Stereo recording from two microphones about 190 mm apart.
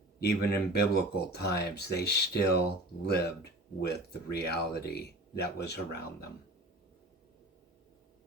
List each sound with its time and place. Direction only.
0.2 s speech: 55° left (ahead or behind)
3.8 s speech: 60° left (ahead or behind)